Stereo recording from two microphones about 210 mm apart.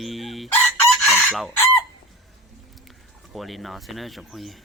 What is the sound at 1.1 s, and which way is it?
Chicken, 5° left (ahead or behind).